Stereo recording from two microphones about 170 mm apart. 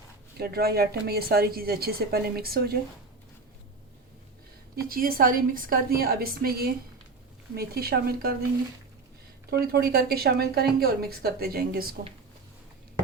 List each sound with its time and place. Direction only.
0.3 s a woman's voice: 65° right (ahead or behind)
4.9 s a woman's voice: 60° right (ahead or behind)
9.7 s a woman's voice: 65° right (ahead or behind)